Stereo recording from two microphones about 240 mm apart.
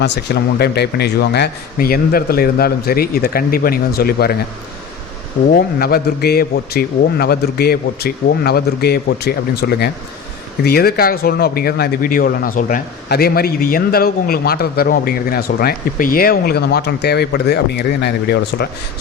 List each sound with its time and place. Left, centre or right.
0.6 s a man's voice: left
5.5 s a man's voice: left